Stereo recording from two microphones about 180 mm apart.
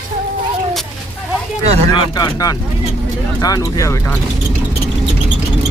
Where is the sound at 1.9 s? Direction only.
25° left (ahead or behind).